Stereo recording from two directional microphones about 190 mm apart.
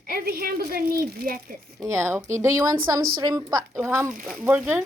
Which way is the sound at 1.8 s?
15° right (ahead or behind).